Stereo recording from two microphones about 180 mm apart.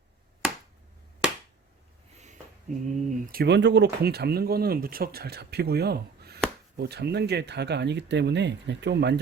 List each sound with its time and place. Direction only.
1.2 s finger snapping: 5° right (ahead or behind)
2.7 s speech: 40° right (ahead or behind)
3.3 s speech: 70° right (ahead or behind)